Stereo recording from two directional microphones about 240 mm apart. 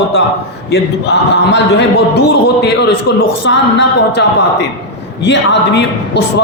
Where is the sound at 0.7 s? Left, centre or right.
Left.